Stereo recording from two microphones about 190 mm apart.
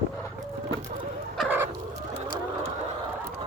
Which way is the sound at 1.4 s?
10° right (ahead or behind).